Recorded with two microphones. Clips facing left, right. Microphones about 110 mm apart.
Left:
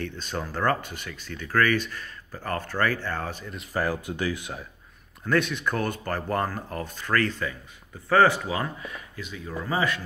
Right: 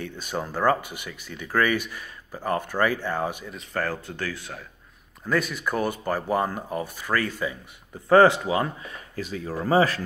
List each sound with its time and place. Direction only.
0.0 s speech: 10° right (ahead or behind)
3.5 s speech: 10° left (ahead or behind)
5.2 s speech: 5° right (ahead or behind)
8.1 s speech: 25° right (ahead or behind)
9.1 s speech: 40° right (ahead or behind)